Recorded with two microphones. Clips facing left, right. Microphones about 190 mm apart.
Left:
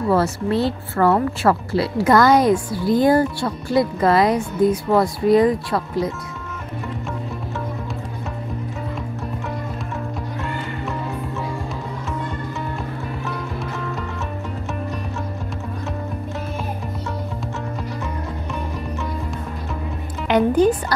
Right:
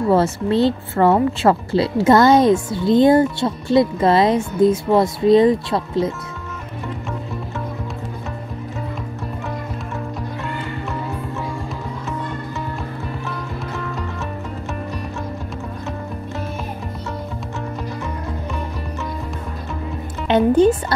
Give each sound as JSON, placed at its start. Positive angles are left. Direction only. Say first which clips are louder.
{"t": 0.1, "sound": "speech", "louder": "right 2 dB", "side_deg": -25}
{"t": 20.2, "sound": "music", "louder": "right 2 dB", "side_deg": -25}